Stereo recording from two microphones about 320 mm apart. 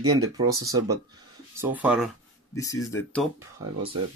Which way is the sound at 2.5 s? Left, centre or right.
Centre.